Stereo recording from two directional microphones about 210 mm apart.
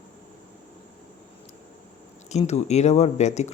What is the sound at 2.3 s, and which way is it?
Speech, 30° left (ahead or behind).